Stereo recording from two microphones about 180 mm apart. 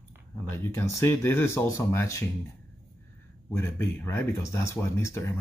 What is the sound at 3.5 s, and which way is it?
Speech, 15° left (ahead or behind).